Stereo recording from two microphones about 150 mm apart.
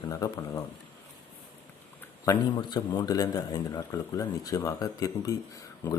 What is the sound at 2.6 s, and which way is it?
Speech, 30° left (ahead or behind).